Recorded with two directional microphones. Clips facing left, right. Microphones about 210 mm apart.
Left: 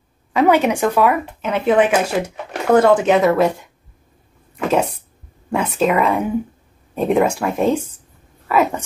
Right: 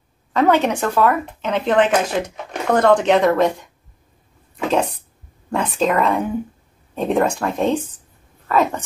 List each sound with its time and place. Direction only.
0.3 s speech: 10° left (ahead or behind)
5.5 s speech: 5° left (ahead or behind)